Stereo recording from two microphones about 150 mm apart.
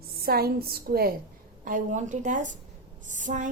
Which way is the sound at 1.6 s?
60° right (ahead or behind).